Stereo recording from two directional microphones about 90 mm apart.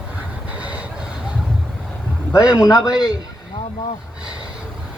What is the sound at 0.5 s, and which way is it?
Vehicle, 15° right (ahead or behind).